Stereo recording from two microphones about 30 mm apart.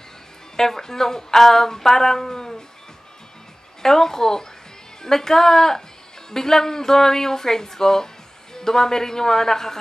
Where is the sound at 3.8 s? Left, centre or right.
Centre.